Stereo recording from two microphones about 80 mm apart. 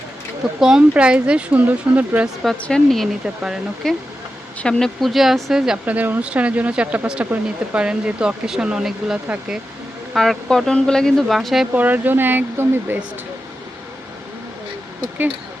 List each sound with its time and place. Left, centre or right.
0.6 s speech: centre
2.2 s speech: centre
2.6 s speech: centre
3.2 s speech: centre
3.8 s speech: centre
5.8 s speech: right
10.2 s speech: centre
11.3 s speech: centre
11.7 s speech: right